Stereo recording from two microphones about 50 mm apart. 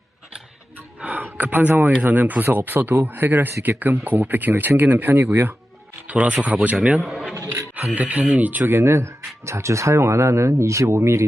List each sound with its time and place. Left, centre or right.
1.0 s speech: right
6.1 s speech: right
7.0 s speech: centre
7.9 s speech: right
8.7 s speech: right
9.5 s speech: right